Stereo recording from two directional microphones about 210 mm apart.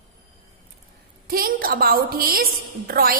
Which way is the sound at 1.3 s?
45° right (ahead or behind).